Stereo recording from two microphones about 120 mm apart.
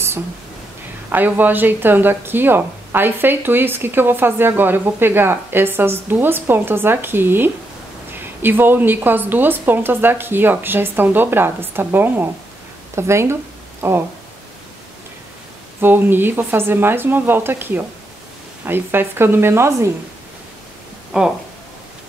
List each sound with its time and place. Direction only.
1.1 s speech: 15° right (ahead or behind)
15.8 s speech: 15° right (ahead or behind)
21.1 s speech: 5° right (ahead or behind)